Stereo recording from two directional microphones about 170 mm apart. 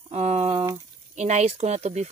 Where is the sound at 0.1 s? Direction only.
40° right (ahead or behind).